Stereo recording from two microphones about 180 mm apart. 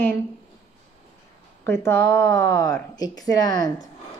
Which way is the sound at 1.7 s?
15° left (ahead or behind).